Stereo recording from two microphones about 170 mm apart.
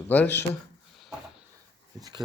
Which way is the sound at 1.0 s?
Centre (ahead or behind).